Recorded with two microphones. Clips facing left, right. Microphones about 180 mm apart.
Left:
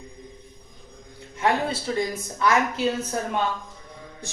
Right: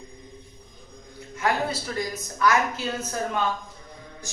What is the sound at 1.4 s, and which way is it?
Speech, 25° left (ahead or behind).